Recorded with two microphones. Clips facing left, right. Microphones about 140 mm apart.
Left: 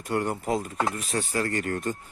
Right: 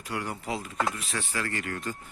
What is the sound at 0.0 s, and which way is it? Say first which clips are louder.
Speech: left 7 dB; 50° left (ahead or behind).